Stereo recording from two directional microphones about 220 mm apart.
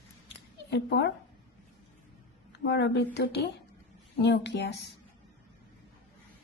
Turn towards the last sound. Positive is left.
turn(degrees=50)  # may be behind; listen again after turning